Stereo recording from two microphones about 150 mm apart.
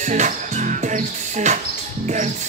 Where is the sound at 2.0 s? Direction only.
50° right (ahead or behind).